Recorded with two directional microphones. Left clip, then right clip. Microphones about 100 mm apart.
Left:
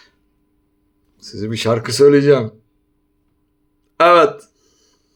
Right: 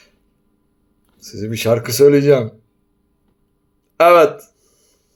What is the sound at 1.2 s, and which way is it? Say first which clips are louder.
Speech: even; 20° left (ahead or behind).